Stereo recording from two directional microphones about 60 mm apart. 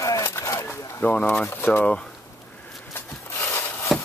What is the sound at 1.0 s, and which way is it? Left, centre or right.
Speech, left.